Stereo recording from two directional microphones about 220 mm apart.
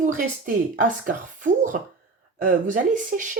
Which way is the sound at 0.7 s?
35° right (ahead or behind).